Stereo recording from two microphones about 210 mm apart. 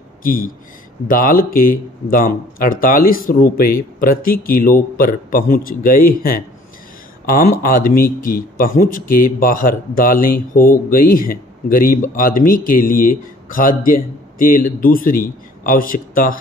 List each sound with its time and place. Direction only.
0.2 s speech: 45° left (ahead or behind)
7.6 s speech: 45° left (ahead or behind)